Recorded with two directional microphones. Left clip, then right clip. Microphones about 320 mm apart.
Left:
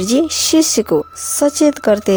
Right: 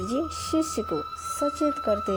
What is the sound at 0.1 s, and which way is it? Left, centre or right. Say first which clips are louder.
Speech: left 15 dB; left.